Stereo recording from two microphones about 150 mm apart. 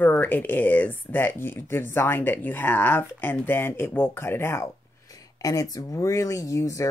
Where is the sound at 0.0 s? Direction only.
10° left (ahead or behind).